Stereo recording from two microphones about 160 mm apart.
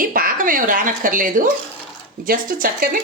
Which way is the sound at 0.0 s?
60° right (ahead or behind).